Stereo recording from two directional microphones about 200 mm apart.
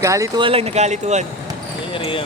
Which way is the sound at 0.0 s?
15° right (ahead or behind).